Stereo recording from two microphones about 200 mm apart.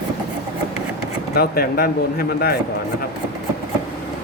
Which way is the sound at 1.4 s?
50° left (ahead or behind).